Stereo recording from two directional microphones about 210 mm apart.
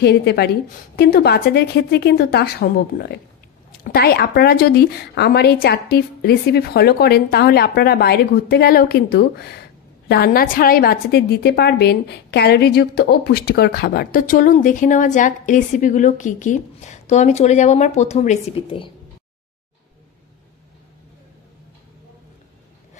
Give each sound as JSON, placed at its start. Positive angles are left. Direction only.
{"t": 0.0, "sound": "a woman's voice", "side_deg": 50}